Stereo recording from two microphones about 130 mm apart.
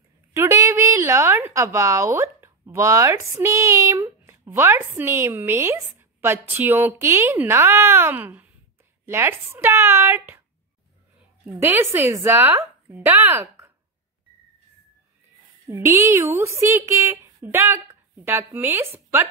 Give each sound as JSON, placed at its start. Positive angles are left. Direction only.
{"t": 0.3, "sound": "a woman's voice", "side_deg": -20}
{"t": 11.6, "sound": "a woman's voice", "side_deg": -15}
{"t": 15.7, "sound": "a woman's voice", "side_deg": -20}